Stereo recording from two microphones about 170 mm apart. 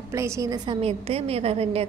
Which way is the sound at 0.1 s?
15° right (ahead or behind).